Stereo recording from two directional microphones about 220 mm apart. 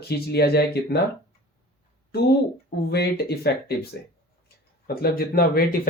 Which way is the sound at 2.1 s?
45° left (ahead or behind).